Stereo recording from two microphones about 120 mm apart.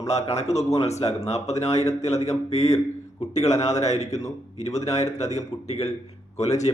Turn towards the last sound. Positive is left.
turn(degrees=65)  # may be behind; listen again after turning